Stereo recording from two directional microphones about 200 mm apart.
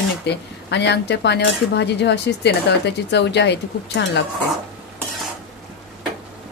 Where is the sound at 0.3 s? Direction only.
60° left (ahead or behind).